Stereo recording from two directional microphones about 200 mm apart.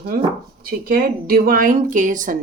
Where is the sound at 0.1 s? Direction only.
45° right (ahead or behind).